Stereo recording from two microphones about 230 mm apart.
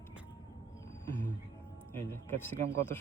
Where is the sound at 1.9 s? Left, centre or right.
Centre.